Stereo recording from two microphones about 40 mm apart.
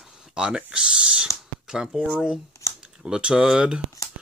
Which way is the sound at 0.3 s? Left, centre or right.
Centre.